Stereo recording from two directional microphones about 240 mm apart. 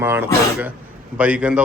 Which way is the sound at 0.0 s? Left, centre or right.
Centre.